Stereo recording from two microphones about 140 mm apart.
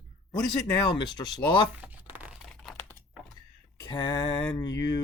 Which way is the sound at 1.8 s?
10° right (ahead or behind).